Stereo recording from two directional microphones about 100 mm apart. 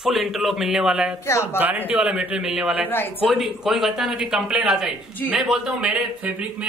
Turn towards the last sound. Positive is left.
turn(degrees=-15)  # may be behind; listen again after turning